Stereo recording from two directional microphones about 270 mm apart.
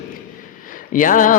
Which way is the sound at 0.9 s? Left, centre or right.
Left.